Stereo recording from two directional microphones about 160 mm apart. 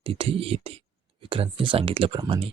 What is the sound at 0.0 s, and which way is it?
Speech, 35° right (ahead or behind).